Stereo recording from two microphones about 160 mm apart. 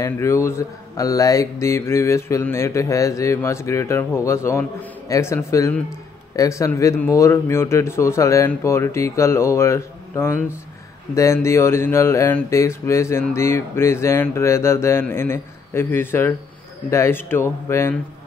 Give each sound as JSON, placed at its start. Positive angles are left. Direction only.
{"t": 0.0, "sound": "mantra", "side_deg": 15}